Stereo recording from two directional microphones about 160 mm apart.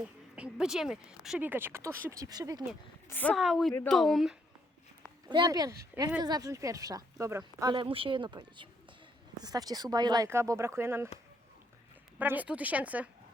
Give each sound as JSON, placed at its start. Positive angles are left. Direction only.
{"t": 0.3, "sound": "speech", "side_deg": -5}
{"t": 3.1, "sound": "a woman's voice", "side_deg": 10}
{"t": 3.3, "sound": "speech", "side_deg": 0}
{"t": 5.3, "sound": "speech", "side_deg": -25}
{"t": 12.2, "sound": "speech", "side_deg": -10}